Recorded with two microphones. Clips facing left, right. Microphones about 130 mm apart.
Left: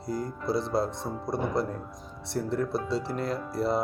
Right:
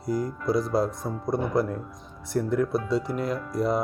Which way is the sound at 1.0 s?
10° right (ahead or behind).